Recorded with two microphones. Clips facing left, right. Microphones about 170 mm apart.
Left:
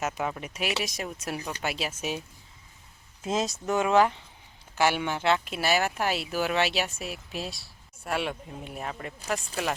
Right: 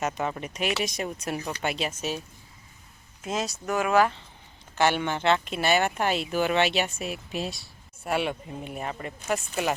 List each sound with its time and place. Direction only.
0.0 s speech: 5° left (ahead or behind)
3.2 s speech: 25° left (ahead or behind)
4.7 s speech: 10° left (ahead or behind)